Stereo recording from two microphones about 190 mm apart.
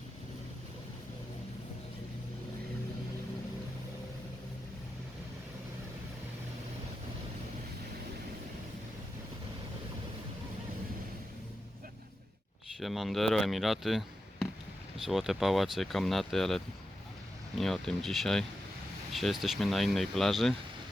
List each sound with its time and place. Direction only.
12.8 s speech: centre (ahead or behind)